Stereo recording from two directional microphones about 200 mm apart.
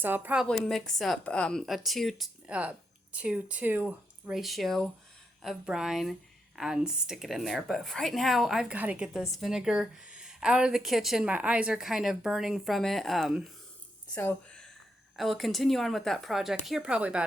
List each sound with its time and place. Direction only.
0.0 s speech: 10° right (ahead or behind)